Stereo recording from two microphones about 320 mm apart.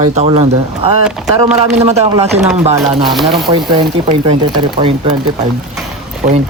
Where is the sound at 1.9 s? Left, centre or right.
Centre.